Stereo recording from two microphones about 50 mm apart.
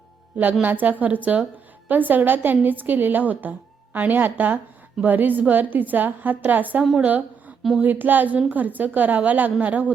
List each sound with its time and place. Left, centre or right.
0.6 s a woman's voice: right